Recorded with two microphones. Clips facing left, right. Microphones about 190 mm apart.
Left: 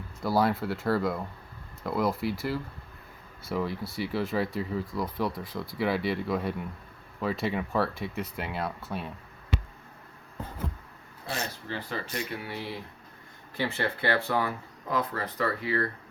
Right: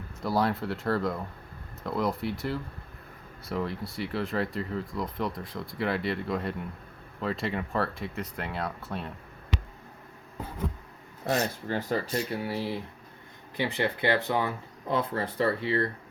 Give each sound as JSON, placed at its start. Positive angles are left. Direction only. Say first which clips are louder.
{"t": 0.2, "sound": "speech", "louder": "left 2 dB", "side_deg": 5}
{"t": 11.3, "sound": "speech", "louder": "right 7 dB", "side_deg": -40}
{"t": 13.6, "sound": "speech", "louder": "right 2 dB", "side_deg": -15}